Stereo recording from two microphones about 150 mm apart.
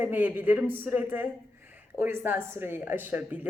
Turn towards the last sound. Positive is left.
turn(degrees=-10)  # may be behind; listen again after turning